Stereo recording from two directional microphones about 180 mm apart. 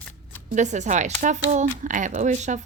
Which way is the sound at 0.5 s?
40° right (ahead or behind).